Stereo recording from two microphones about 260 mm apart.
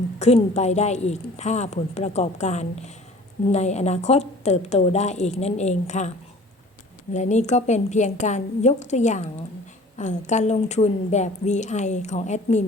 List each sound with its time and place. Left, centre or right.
0.2 s a woman's voice: left